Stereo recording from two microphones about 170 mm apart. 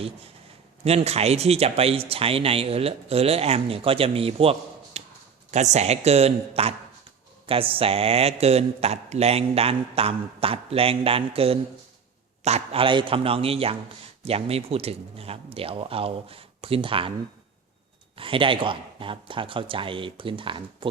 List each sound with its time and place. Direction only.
0.9 s a man's voice: 40° right (ahead or behind)
4.9 s a sound: 40° right (ahead or behind)
5.7 s a man's voice: 40° right (ahead or behind)
18.2 s a man's voice: 30° right (ahead or behind)